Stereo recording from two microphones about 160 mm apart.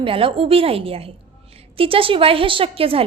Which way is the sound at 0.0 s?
35° right (ahead or behind).